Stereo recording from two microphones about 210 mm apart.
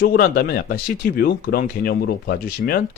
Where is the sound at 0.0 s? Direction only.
45° left (ahead or behind).